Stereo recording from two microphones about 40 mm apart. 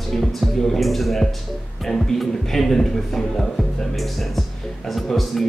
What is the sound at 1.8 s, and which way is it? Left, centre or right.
Speech, centre.